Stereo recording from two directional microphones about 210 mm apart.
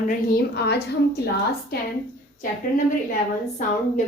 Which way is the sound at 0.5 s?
50° left (ahead or behind).